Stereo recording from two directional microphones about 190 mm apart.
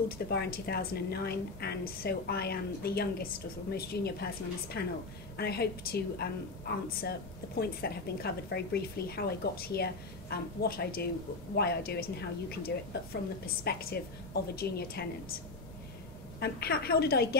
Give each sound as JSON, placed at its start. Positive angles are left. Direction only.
{"t": 0.3, "sound": "a woman's voice", "side_deg": 55}
{"t": 16.3, "sound": "a woman's voice", "side_deg": 55}